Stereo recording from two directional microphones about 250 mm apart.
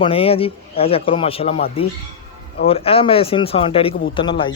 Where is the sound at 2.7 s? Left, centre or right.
Left.